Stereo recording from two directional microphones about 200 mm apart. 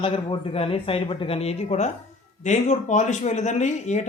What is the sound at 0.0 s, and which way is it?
Speech, 25° left (ahead or behind).